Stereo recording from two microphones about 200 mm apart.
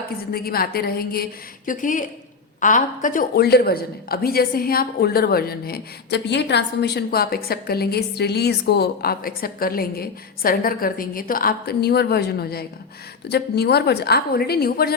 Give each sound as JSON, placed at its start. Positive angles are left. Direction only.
{"t": 0.3, "sound": "speech", "side_deg": 50}